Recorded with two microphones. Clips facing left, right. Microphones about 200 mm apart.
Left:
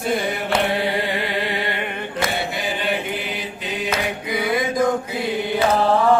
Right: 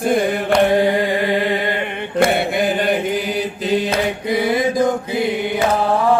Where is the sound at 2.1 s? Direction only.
50° right (ahead or behind).